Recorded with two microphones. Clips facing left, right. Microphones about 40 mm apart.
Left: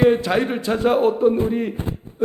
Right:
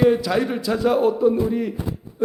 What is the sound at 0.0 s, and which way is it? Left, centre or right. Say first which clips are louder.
A man's voice: left 1 dB; left.